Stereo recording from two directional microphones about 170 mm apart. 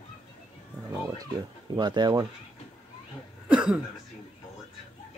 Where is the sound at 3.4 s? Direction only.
5° right (ahead or behind).